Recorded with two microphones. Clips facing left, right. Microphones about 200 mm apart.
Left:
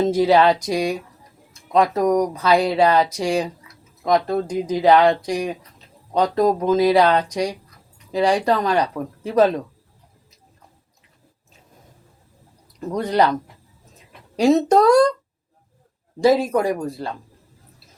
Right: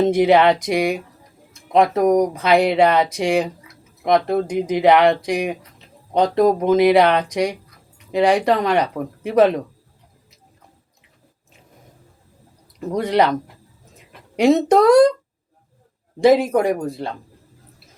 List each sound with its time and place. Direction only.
0.1 s speech: 20° right (ahead or behind)
12.9 s speech: 20° right (ahead or behind)
14.7 s speech: 20° right (ahead or behind)
16.2 s speech: 20° right (ahead or behind)